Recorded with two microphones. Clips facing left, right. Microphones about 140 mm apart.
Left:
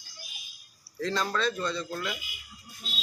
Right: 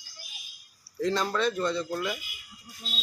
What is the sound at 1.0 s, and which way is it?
Speech, 15° right (ahead or behind).